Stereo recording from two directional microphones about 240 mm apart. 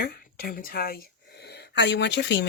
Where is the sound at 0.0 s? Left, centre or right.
Left.